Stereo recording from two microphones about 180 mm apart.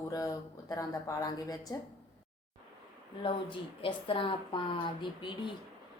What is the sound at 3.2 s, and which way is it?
Speech, 30° left (ahead or behind).